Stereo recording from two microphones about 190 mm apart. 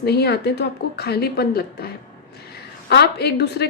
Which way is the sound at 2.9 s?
60° left (ahead or behind).